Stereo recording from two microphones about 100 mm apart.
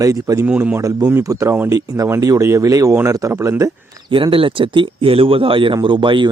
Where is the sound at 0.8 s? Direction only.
35° right (ahead or behind).